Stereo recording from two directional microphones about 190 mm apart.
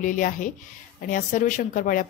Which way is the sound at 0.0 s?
45° left (ahead or behind).